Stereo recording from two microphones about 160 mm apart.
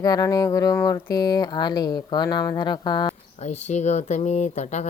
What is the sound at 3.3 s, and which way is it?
Speech, 45° left (ahead or behind).